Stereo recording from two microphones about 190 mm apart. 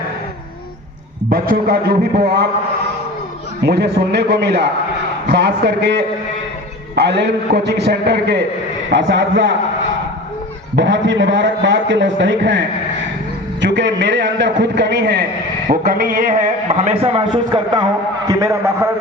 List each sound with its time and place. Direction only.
1.3 s a man's voice: 50° right (ahead or behind)
3.6 s a man's voice: 60° right (ahead or behind)
8.9 s a man's voice: 75° right (ahead or behind)
10.8 s a man's voice: 75° right (ahead or behind)
15.7 s a man's voice: 50° right (ahead or behind); by 18.9 s 15° right (ahead or behind)